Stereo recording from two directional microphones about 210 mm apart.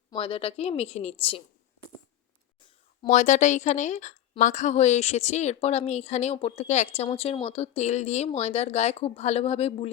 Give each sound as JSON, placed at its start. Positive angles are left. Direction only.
{"t": 0.1, "sound": "speech", "side_deg": 25}
{"t": 3.0, "sound": "a woman's voice", "side_deg": 35}